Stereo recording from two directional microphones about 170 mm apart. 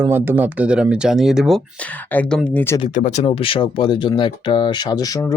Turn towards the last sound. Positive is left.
turn(degrees=20)  # may be behind; listen again after turning